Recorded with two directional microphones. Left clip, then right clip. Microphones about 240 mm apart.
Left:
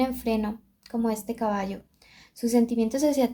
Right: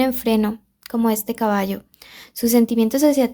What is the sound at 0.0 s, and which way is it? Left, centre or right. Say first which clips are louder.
Speech: right 7 dB; right.